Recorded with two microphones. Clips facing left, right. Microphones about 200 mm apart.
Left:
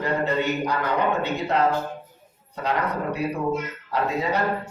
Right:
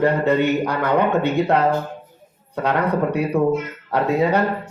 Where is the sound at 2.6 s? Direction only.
60° right (ahead or behind).